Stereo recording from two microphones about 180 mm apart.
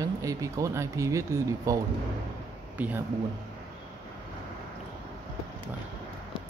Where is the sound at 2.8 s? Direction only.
10° right (ahead or behind).